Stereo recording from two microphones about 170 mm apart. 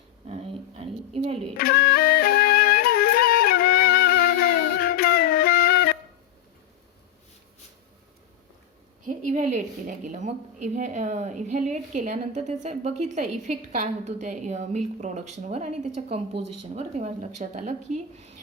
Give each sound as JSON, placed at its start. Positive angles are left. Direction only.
{"t": 0.8, "sound": "a sound", "side_deg": -35}
{"t": 1.5, "sound": "flute", "side_deg": 65}
{"t": 9.0, "sound": "a woman's voice", "side_deg": -45}